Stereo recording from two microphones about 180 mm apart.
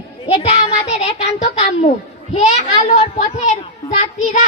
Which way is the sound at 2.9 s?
40° left (ahead or behind).